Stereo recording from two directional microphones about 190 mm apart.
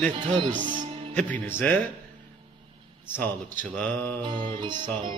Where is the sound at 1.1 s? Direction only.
10° left (ahead or behind).